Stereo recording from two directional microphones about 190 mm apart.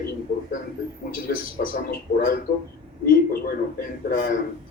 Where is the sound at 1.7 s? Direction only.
50° left (ahead or behind).